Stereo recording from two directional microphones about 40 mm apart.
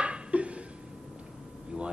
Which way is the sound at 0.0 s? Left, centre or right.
Right.